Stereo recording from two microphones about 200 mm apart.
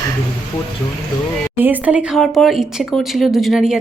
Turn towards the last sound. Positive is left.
turn(degrees=0)  # may be behind; listen again after turning